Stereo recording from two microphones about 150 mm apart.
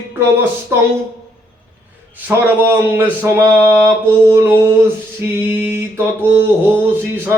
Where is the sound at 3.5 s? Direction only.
10° left (ahead or behind).